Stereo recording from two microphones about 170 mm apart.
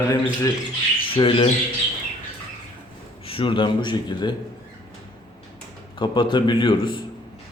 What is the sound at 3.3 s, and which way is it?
Speech, 30° left (ahead or behind).